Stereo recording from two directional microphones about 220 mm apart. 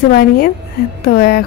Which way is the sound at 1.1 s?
45° left (ahead or behind).